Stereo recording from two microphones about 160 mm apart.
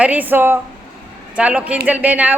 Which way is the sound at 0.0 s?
10° right (ahead or behind).